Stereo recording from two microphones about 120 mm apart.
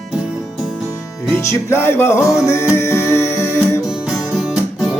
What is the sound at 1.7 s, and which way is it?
Music, 20° left (ahead or behind).